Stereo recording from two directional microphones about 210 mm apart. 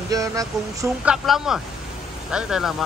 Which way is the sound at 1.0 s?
Centre (ahead or behind).